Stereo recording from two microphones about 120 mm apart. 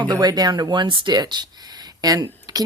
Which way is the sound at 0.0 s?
35° right (ahead or behind).